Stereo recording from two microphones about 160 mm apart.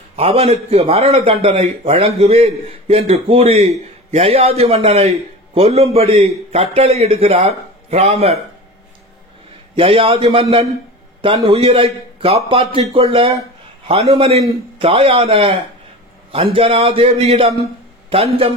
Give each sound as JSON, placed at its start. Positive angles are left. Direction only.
{"t": 0.1, "sound": "a man's voice", "side_deg": -40}
{"t": 9.8, "sound": "a man's voice", "side_deg": -35}